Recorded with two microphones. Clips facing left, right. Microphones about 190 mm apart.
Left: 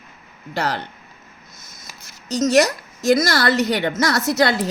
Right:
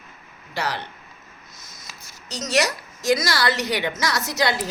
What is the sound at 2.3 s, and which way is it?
A woman's voice, 50° left (ahead or behind).